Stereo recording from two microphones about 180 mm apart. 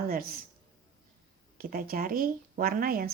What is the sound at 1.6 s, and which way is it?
A woman's voice, 55° right (ahead or behind).